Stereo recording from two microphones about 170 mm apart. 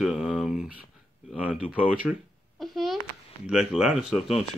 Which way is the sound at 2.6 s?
Centre (ahead or behind).